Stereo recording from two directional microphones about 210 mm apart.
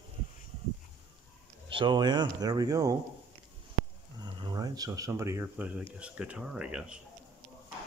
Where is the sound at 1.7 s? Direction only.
25° right (ahead or behind).